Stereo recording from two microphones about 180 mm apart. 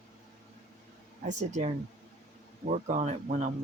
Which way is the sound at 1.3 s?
40° right (ahead or behind).